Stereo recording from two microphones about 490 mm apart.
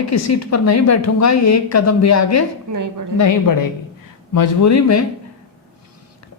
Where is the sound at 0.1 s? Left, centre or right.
Left.